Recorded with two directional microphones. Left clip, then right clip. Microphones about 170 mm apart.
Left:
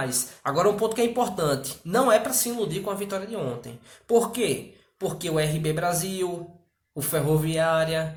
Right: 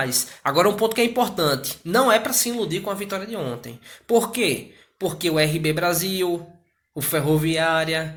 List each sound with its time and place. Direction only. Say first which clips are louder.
0.0 s speech: right 5 dB; 20° right (ahead or behind)